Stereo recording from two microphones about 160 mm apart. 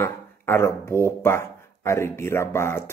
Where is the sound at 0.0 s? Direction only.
15° left (ahead or behind).